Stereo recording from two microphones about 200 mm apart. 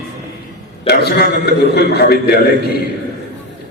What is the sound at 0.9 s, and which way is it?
A man's voice, 50° left (ahead or behind).